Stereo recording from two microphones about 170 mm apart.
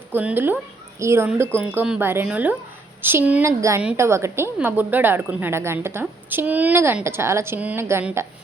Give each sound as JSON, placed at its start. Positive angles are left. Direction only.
{"t": 0.1, "sound": "a woman's voice", "side_deg": -10}